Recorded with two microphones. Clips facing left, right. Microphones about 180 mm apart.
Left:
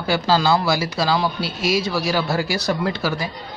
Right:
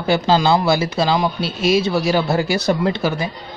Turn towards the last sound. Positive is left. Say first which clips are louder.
# right 3 dB
turn(degrees=-25)  # may be behind; listen again after turning